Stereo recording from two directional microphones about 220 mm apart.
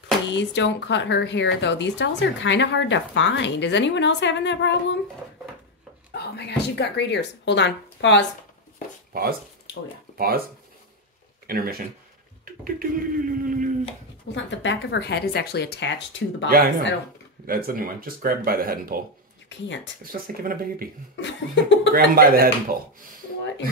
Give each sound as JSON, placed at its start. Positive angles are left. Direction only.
{"t": 0.3, "sound": "speech", "side_deg": 55}
{"t": 6.1, "sound": "speech", "side_deg": 50}
{"t": 9.1, "sound": "speech", "side_deg": -45}
{"t": 11.4, "sound": "speech", "side_deg": -45}
{"t": 12.7, "sound": "speech", "side_deg": -40}
{"t": 14.3, "sound": "speech", "side_deg": 55}
{"t": 16.4, "sound": "speech", "side_deg": -40}
{"t": 19.5, "sound": "speech", "side_deg": 55}
{"t": 20.1, "sound": "speech", "side_deg": -40}
{"t": 21.2, "sound": "speech", "side_deg": 55}
{"t": 21.9, "sound": "speech", "side_deg": -40}